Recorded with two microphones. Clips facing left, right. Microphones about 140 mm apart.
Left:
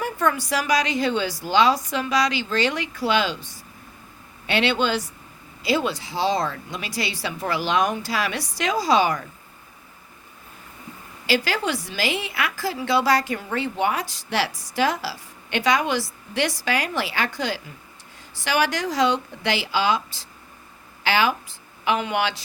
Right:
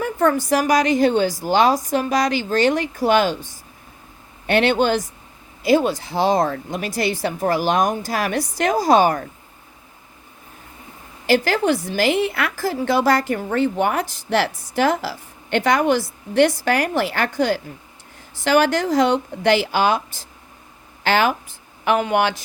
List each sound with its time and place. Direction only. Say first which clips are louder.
0.0 s a woman's voice: right 5 dB; 50° right (ahead or behind)
4.4 s a woman's voice: right 5 dB; 50° right (ahead or behind)
11.3 s a woman's voice: right 6 dB; 50° right (ahead or behind)